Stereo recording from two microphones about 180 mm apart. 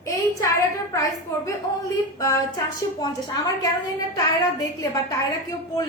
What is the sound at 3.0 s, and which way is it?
Speech, 20° left (ahead or behind).